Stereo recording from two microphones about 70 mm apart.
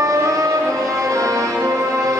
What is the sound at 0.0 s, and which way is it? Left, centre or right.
Music, right.